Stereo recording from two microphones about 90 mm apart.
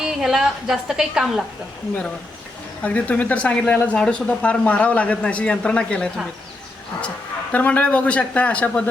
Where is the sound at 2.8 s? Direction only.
15° left (ahead or behind).